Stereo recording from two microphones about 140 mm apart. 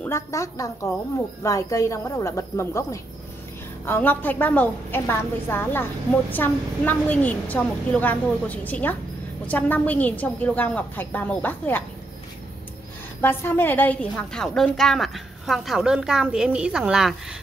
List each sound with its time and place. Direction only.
0.0 s a woman's voice: 20° left (ahead or behind)
13.2 s a woman's voice: 15° left (ahead or behind); by 17.4 s 5° right (ahead or behind)